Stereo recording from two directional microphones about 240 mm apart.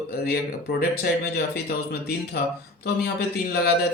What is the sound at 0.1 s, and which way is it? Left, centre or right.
A man's voice, left.